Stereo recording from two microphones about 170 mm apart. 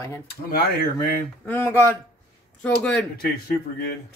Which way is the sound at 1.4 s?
10° left (ahead or behind).